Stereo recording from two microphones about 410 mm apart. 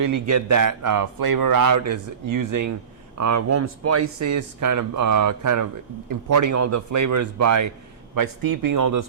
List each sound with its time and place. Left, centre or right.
0.0 s a man's voice: right
8.1 s a man's voice: right